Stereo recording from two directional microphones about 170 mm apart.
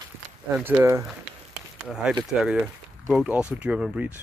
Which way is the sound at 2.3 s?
5° right (ahead or behind).